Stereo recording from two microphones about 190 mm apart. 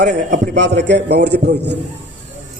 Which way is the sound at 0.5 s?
70° right (ahead or behind).